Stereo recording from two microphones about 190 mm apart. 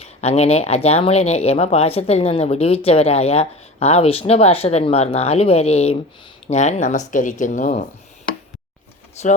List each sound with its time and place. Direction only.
0.0 s speech: 35° left (ahead or behind)
9.2 s speech: 35° left (ahead or behind)